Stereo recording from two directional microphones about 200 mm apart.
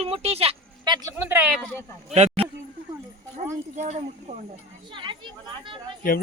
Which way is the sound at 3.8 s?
35° right (ahead or behind).